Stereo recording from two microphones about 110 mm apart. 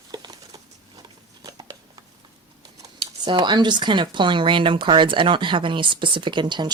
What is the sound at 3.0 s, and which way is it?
Speech, 45° right (ahead or behind).